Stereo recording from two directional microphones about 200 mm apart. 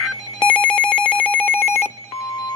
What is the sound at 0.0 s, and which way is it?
Telephone, 5° left (ahead or behind).